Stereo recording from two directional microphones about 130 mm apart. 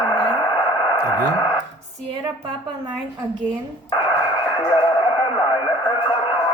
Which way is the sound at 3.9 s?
35° left (ahead or behind).